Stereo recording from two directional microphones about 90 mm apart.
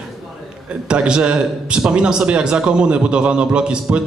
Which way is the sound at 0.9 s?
10° right (ahead or behind).